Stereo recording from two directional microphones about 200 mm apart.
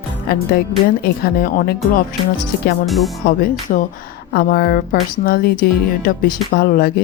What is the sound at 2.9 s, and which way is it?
Speech, centre (ahead or behind).